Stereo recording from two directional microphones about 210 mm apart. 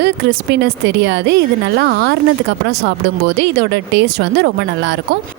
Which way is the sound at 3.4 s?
55° right (ahead or behind).